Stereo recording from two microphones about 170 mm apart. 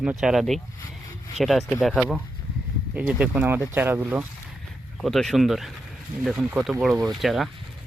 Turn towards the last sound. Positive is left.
turn(degrees=0)  # may be behind; listen again after turning